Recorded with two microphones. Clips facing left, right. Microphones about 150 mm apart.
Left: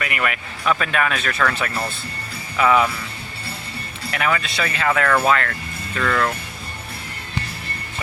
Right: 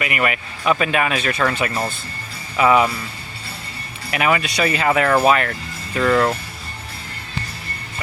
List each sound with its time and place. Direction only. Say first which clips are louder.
0.0 s speech: right 3 dB; 10° right (ahead or behind)
4.1 s speech: right 3 dB; 15° right (ahead or behind)